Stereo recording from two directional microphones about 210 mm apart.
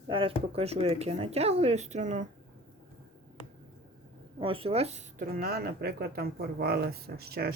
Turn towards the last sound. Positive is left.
turn(degrees=-50)  # may be behind; listen again after turning